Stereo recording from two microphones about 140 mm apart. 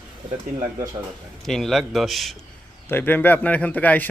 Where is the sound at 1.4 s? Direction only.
Centre (ahead or behind).